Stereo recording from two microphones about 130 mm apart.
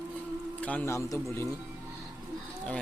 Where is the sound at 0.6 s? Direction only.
10° left (ahead or behind).